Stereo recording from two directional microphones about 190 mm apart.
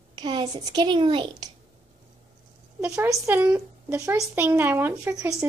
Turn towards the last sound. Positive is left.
turn(degrees=-10)  # may be behind; listen again after turning